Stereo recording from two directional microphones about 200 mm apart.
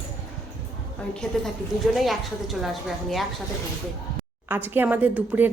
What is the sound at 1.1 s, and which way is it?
A woman's voice, 5° left (ahead or behind).